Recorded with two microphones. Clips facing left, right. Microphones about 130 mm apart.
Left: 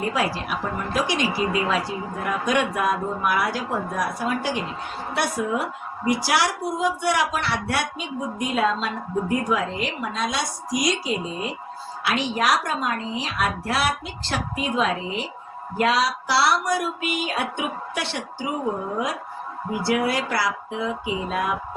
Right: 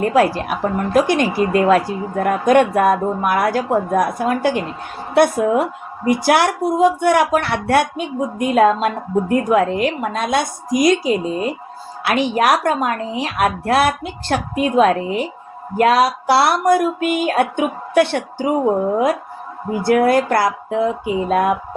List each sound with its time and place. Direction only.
0.0 s speech: 50° right (ahead or behind)